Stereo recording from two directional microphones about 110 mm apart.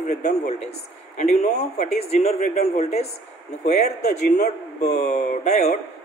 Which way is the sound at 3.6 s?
90° left.